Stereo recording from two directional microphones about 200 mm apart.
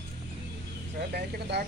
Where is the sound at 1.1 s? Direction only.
55° right (ahead or behind).